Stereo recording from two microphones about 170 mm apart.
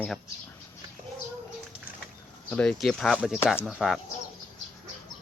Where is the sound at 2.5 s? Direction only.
5° left (ahead or behind).